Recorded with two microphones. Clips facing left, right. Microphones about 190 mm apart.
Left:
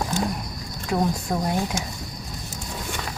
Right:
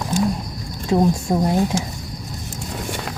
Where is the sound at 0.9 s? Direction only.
25° right (ahead or behind).